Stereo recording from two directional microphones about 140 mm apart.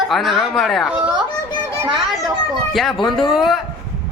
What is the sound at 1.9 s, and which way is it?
Children playing, centre (ahead or behind).